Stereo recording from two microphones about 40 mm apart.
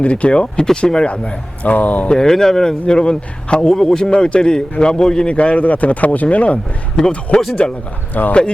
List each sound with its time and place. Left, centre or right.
0.0 s a man's voice: left
1.0 s a man's voice: left
1.7 s a man's voice: left
2.0 s speech: centre
2.8 s a man's voice: left
4.1 s a man's voice: left